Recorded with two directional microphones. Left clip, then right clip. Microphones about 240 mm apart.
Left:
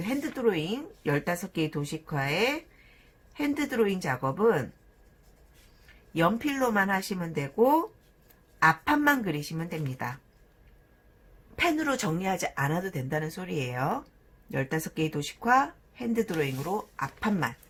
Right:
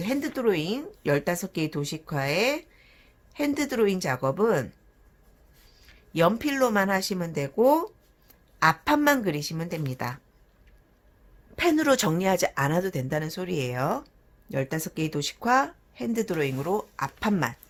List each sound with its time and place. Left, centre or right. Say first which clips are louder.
0.0 s speech: right 2 dB; right
6.1 s speech: right 4 dB; right
11.5 s speech: right 5 dB; right